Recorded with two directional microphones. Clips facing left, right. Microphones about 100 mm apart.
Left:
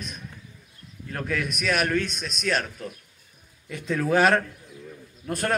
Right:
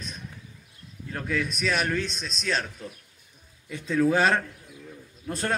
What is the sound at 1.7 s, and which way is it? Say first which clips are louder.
Speech: left 3 dB; 5° left (ahead or behind).